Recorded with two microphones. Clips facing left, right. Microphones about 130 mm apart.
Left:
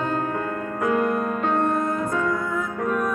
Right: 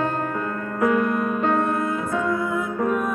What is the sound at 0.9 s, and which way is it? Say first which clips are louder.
Music: left 3 dB; 50° left (ahead or behind).